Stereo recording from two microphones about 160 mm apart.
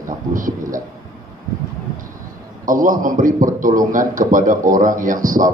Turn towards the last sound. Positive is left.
turn(degrees=-55)  # may be behind; listen again after turning